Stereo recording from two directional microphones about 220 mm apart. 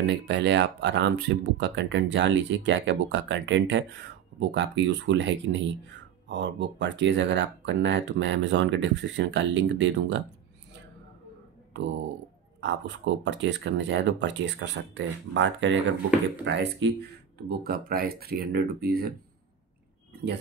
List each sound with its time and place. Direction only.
0.0 s speech: 50° right (ahead or behind)
12.5 s speech: 55° right (ahead or behind)
17.5 s speech: 40° right (ahead or behind)